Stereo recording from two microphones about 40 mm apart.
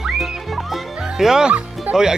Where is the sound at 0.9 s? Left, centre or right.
Centre.